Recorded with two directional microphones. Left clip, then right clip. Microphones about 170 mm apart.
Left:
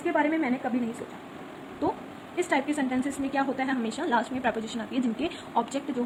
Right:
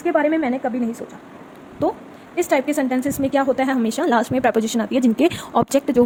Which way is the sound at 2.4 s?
90° right.